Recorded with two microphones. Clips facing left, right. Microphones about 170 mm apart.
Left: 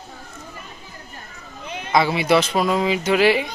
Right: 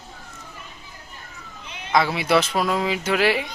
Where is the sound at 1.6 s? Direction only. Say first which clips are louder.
Left 8 dB; 50° left (ahead or behind).